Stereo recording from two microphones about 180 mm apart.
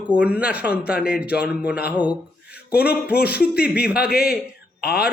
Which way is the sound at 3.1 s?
60° left (ahead or behind).